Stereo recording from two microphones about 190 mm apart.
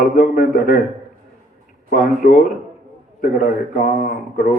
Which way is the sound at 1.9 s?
50° left (ahead or behind).